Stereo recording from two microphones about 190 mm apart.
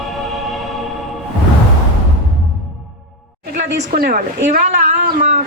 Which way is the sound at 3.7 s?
55° right (ahead or behind).